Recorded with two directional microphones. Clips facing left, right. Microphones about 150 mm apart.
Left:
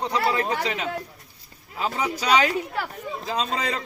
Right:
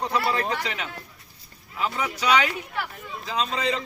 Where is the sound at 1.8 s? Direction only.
35° left (ahead or behind).